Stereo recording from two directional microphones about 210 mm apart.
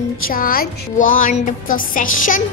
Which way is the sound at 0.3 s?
45° left (ahead or behind).